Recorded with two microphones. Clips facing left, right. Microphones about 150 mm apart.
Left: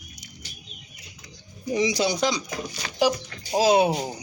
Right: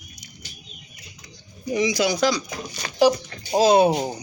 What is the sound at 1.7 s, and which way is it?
Speech, 30° left (ahead or behind).